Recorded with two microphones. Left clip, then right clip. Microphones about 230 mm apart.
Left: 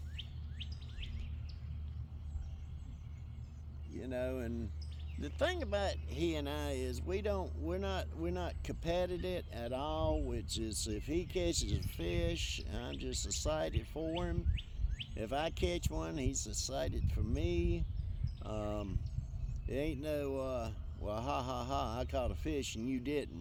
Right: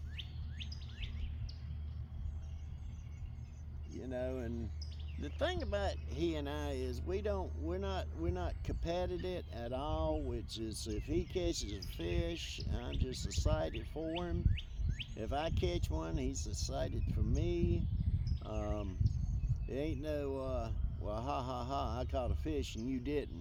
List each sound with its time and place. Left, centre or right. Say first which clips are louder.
4.0 s speech: left 1 dB; left